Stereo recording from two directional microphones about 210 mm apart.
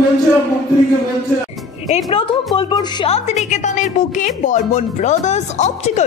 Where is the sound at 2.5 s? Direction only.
20° left (ahead or behind).